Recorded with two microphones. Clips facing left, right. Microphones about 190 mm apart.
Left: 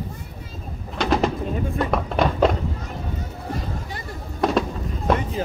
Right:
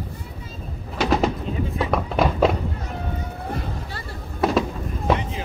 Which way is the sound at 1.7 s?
Centre (ahead or behind).